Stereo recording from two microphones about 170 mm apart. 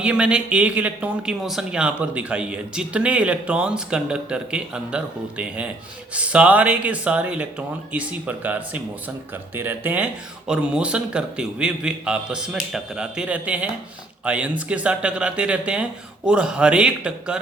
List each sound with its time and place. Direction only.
0.0 s a man's voice: 5° right (ahead or behind)